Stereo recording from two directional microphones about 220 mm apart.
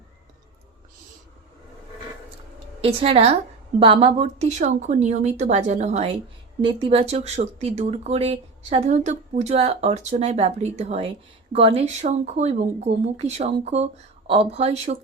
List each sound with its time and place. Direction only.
2.8 s speech: 25° right (ahead or behind)